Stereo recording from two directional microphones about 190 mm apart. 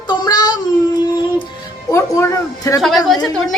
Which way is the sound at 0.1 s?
20° left (ahead or behind).